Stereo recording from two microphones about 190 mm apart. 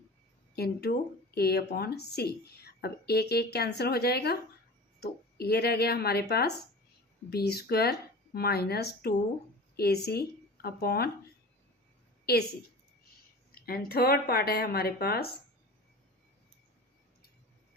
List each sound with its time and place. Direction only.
0.5 s a woman's voice: 55° left (ahead or behind)
12.2 s a woman's voice: 55° left (ahead or behind)
13.5 s speech: 55° left (ahead or behind)